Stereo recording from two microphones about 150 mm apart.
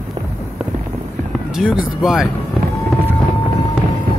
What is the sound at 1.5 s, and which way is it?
Speech, 5° right (ahead or behind).